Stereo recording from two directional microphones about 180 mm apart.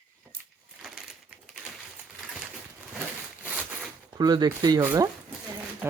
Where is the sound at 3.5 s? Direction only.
5° right (ahead or behind).